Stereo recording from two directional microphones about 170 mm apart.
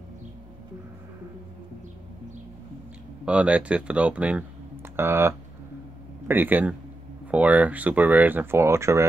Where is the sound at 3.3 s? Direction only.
5° right (ahead or behind).